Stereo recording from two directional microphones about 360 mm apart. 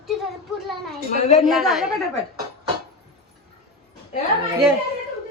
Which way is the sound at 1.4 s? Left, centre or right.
Centre.